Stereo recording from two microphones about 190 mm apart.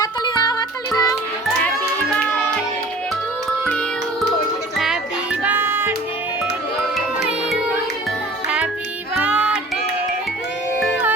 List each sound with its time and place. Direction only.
0.0 s music: 20° left (ahead or behind)
3.7 s music: 5° left (ahead or behind); by 5.9 s 10° right (ahead or behind)
8.4 s music: 5° right (ahead or behind)